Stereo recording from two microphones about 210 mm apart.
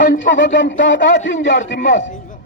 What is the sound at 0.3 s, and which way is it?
A man's voice, 60° left (ahead or behind).